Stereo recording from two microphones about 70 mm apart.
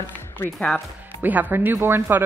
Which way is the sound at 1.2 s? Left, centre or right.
Right.